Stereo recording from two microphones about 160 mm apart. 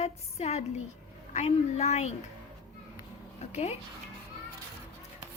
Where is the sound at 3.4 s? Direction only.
45° left (ahead or behind).